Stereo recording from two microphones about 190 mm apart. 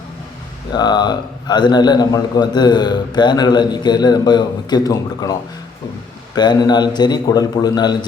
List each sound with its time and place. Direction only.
0.7 s a man's voice: 20° left (ahead or behind)